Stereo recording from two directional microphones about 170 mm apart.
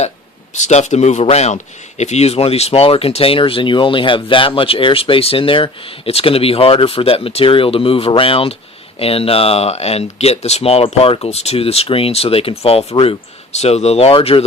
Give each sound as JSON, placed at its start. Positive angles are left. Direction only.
{"t": 0.6, "sound": "speech", "side_deg": 45}